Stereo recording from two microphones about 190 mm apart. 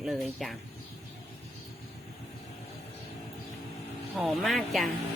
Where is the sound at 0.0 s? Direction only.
Centre (ahead or behind).